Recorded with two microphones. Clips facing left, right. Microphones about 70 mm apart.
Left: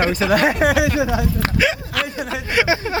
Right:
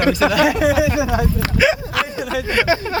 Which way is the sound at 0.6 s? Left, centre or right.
Left.